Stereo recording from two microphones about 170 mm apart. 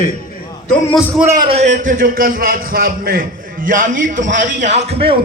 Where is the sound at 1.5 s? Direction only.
45° right (ahead or behind).